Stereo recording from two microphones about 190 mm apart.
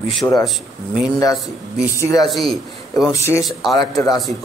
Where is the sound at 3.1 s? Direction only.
15° left (ahead or behind).